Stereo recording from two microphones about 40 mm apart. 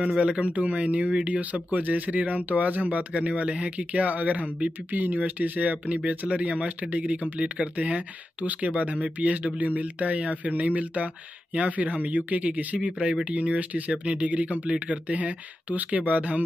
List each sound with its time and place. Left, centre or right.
0.0 s speech: right